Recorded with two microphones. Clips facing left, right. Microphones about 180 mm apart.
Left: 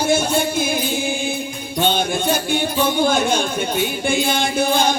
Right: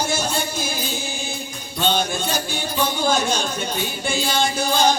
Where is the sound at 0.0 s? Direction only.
55° left (ahead or behind).